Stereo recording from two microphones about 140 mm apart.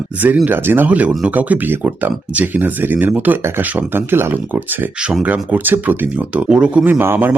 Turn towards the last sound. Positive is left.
turn(degrees=-15)  # may be behind; listen again after turning